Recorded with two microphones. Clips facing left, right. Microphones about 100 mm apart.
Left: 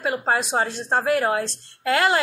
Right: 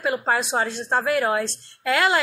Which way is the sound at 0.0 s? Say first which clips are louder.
Even; 35° left (ahead or behind).